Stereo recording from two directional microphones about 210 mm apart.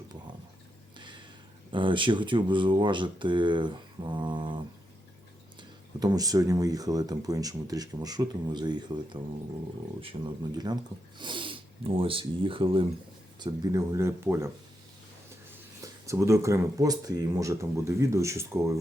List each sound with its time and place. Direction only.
0.9 s a sound: 20° right (ahead or behind)
1.7 s speech: 25° right (ahead or behind)
15.8 s speech: 15° right (ahead or behind)